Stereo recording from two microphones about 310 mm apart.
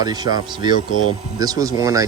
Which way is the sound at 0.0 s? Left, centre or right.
Centre.